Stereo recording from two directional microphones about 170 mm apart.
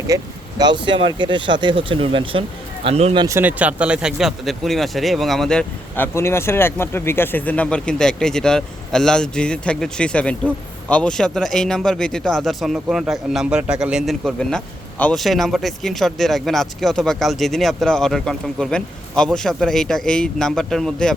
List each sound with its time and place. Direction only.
0.1 s a man's voice: 20° right (ahead or behind); by 3.2 s 35° right (ahead or behind)
3.2 s speech: 10° right (ahead or behind); by 6.1 s 5° left (ahead or behind)
6.1 s speech: 15° left (ahead or behind)